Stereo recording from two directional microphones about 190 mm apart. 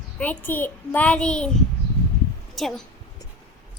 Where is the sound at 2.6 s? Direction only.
Centre (ahead or behind).